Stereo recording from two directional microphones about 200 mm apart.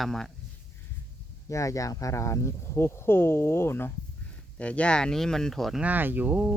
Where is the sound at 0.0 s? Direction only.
Centre (ahead or behind).